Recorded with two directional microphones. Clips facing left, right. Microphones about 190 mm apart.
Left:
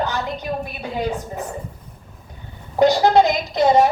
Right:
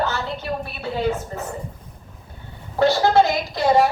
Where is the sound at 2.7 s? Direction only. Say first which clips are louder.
Left 2 dB; 15° left (ahead or behind).